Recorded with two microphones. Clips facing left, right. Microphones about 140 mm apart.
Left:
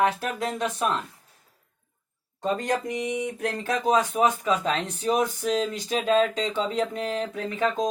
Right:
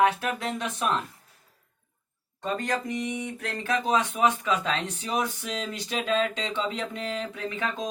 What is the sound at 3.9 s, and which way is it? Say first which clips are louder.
Speech: left 2 dB; 40° left (ahead or behind).